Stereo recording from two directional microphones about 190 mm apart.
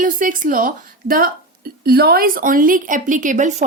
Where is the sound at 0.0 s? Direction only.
45° right (ahead or behind).